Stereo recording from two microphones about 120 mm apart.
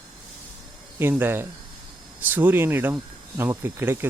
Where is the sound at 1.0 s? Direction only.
20° right (ahead or behind).